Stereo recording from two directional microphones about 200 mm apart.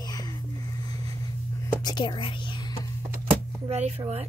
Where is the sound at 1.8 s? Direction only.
20° left (ahead or behind).